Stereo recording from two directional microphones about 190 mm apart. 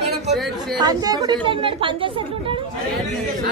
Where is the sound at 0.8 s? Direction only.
20° right (ahead or behind).